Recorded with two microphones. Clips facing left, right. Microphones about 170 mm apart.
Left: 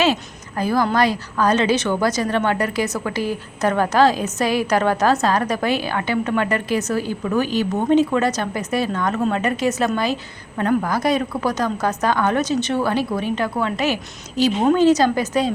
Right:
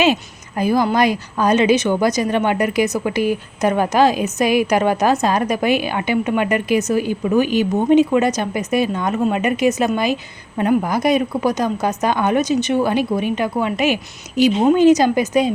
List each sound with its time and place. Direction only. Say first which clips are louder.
0.0 s a woman's voice: right 2 dB; 15° right (ahead or behind)